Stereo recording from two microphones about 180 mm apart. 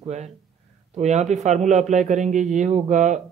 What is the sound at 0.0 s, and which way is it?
A man's voice, 40° right (ahead or behind).